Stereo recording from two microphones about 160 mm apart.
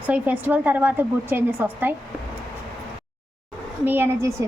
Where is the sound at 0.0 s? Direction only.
10° right (ahead or behind).